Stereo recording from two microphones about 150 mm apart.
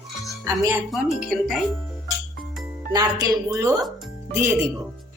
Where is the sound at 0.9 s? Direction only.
Centre (ahead or behind).